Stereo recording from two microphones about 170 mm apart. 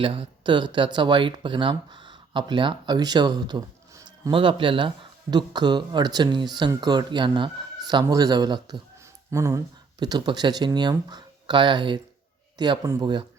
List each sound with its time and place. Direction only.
0.0 s speech: 30° right (ahead or behind)